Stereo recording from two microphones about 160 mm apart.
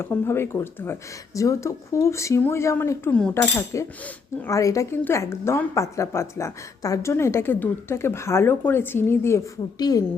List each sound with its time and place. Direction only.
0.0 s a woman's voice: 15° left (ahead or behind)